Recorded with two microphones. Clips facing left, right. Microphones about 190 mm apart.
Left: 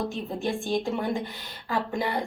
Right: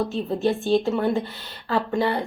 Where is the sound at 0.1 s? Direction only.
15° left (ahead or behind).